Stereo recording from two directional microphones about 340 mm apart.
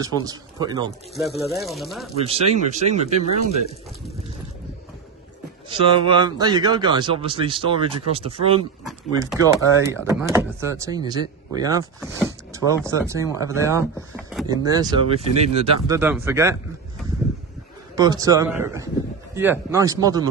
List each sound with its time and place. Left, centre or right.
0.0 s speech: centre
2.1 s speech: centre
5.7 s speech: centre
17.9 s speech: centre